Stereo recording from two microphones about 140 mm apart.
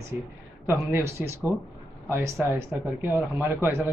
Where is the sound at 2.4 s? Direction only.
10° right (ahead or behind).